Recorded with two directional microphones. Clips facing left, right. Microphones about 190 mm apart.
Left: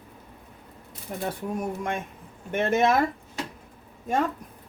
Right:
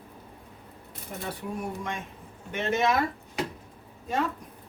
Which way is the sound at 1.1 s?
55° left (ahead or behind).